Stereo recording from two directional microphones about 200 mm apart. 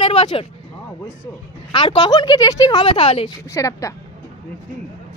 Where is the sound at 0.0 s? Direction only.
25° left (ahead or behind).